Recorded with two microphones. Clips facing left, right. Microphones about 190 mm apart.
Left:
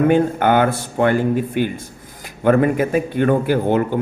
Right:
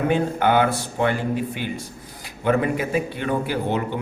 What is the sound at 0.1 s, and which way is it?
A man's voice, 50° left (ahead or behind).